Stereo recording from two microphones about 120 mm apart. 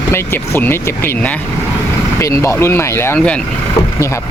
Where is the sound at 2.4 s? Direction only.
20° left (ahead or behind).